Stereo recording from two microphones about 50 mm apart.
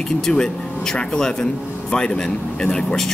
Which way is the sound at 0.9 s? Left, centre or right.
Centre.